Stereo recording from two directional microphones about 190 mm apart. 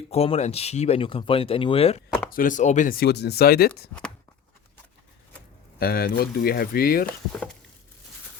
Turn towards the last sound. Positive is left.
turn(degrees=50)  # may be behind; listen again after turning